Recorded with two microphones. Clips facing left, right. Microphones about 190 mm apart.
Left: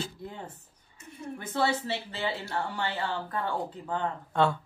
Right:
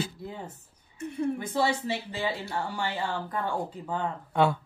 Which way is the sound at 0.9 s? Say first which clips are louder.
Right 12 dB; 60° right (ahead or behind).